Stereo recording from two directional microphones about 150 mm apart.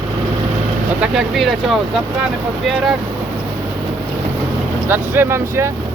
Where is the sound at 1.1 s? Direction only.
Centre (ahead or behind).